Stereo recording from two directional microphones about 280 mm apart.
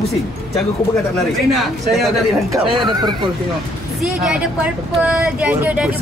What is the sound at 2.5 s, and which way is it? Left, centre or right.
Speech, centre.